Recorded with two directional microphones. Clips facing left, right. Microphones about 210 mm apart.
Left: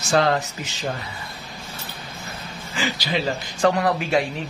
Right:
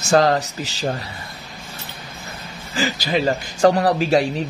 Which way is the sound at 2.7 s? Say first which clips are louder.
Right 4 dB; 45° right (ahead or behind).